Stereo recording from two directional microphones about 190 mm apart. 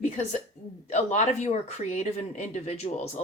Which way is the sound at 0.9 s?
35° left (ahead or behind).